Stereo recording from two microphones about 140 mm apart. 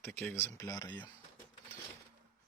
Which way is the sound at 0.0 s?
15° left (ahead or behind).